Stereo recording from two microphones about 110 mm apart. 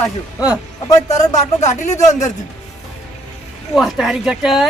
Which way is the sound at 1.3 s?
90° left.